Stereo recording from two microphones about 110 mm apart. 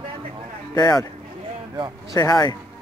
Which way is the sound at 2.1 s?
30° left (ahead or behind).